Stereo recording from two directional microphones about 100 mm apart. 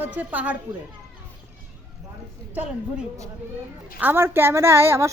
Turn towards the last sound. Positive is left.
turn(degrees=-25)  # may be behind; listen again after turning